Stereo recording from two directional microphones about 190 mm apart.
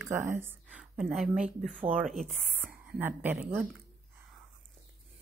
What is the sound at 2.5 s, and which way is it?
Speech, 10° right (ahead or behind).